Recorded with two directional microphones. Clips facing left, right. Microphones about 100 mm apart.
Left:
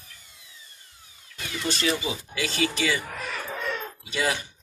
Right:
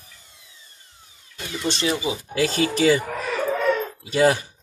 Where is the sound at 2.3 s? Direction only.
40° right (ahead or behind).